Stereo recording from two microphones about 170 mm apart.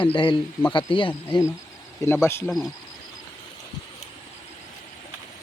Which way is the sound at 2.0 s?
15° left (ahead or behind).